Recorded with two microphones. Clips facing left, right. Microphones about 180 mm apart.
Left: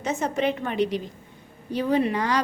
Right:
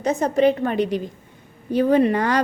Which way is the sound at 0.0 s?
35° right (ahead or behind).